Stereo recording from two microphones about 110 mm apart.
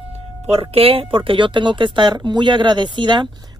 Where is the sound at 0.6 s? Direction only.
55° right (ahead or behind).